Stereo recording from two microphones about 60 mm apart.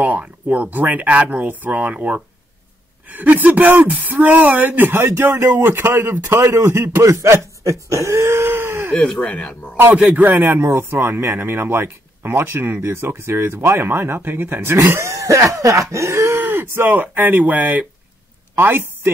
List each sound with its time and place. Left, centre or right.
0.0 s speech: right
3.3 s speech: right
6.2 s a man's voice: right
9.2 s speech: left
9.9 s speech: right